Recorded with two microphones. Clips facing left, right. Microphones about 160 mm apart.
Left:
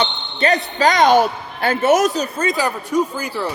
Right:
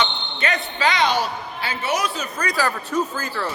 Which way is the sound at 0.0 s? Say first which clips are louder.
Left 5 dB; 35° left (ahead or behind).